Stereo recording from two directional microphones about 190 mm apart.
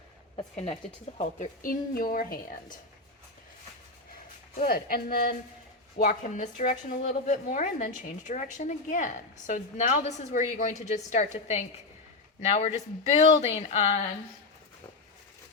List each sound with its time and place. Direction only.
0.3 s speech: 30° left (ahead or behind)
1.2 s speech: 40° left (ahead or behind)
4.1 s a woman's voice: 50° left (ahead or behind)